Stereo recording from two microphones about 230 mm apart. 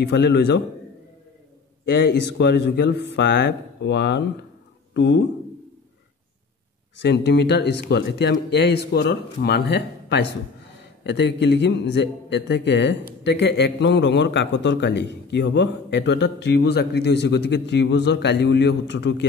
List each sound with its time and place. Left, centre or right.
0.0 s a man's voice: left
1.9 s a man's voice: left
7.0 s a man's voice: left